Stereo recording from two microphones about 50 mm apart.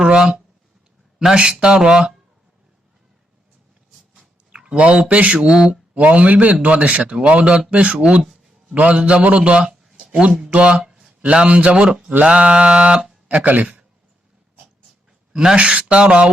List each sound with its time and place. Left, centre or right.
0.0 s speech: centre
4.5 s a man's voice: right
5.9 s a man's voice: right
10.8 s a sound: centre
11.2 s a man's voice: right
13.3 s speech: right
15.3 s speech: centre